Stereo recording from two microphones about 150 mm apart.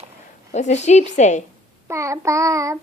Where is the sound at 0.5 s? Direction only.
50° left (ahead or behind).